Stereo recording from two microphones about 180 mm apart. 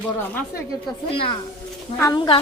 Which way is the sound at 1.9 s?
20° left (ahead or behind).